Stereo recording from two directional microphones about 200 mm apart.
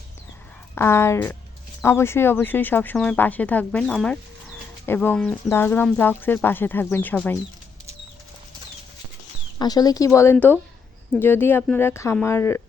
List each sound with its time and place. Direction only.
0.8 s speech: 15° left (ahead or behind)
9.6 s speech: 20° left (ahead or behind)